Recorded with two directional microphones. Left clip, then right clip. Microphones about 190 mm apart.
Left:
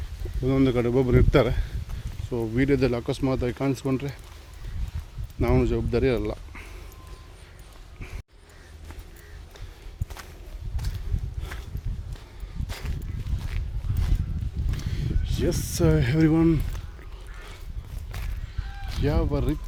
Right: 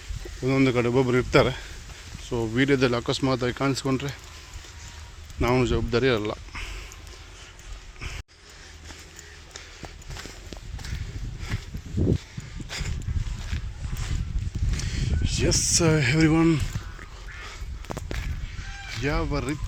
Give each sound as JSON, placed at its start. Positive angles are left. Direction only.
{"t": 0.4, "sound": "speech", "side_deg": 10}
{"t": 2.3, "sound": "speech", "side_deg": 0}
{"t": 5.4, "sound": "speech", "side_deg": 5}
{"t": 11.5, "sound": "a sound", "side_deg": -15}
{"t": 14.8, "sound": "a sound", "side_deg": 15}
{"t": 18.9, "sound": "speech", "side_deg": 20}